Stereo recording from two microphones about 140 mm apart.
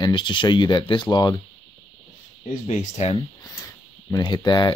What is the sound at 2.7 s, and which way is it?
Speech, 55° left (ahead or behind).